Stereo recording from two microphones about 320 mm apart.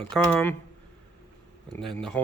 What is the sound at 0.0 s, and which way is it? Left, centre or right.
Speech, centre.